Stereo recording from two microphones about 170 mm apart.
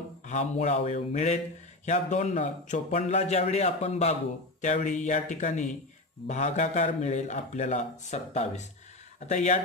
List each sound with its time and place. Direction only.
0.3 s a man's voice: 40° left (ahead or behind)